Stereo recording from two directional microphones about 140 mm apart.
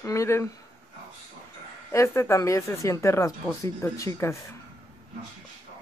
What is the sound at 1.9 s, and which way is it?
Speech, 20° left (ahead or behind).